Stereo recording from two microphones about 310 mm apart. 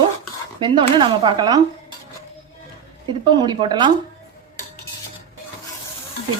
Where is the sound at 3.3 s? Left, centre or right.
Centre.